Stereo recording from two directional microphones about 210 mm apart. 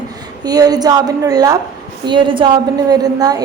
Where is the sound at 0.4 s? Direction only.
20° right (ahead or behind).